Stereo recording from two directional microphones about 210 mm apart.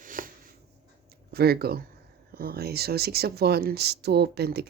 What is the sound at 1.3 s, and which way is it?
Speech, 50° right (ahead or behind).